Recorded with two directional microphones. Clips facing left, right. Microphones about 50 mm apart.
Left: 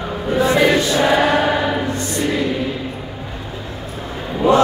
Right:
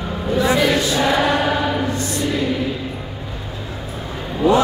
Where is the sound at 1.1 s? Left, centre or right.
Centre.